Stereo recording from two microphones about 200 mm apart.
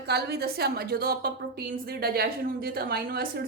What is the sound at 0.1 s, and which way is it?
Speech, 55° right (ahead or behind).